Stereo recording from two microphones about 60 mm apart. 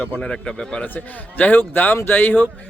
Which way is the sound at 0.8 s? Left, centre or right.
Left.